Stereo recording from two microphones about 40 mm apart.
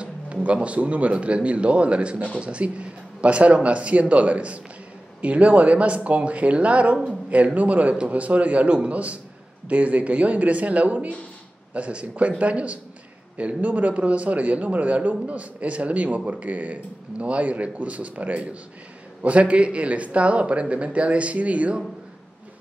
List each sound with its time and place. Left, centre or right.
0.0 s speech: right